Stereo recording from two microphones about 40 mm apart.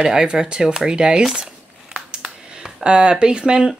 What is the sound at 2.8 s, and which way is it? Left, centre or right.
Speech, right.